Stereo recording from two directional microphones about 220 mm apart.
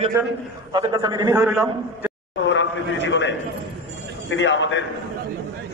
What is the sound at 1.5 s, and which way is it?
Speech, centre (ahead or behind).